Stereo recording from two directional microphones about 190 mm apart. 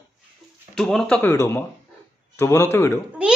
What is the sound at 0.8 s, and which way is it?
Speech, 5° left (ahead or behind).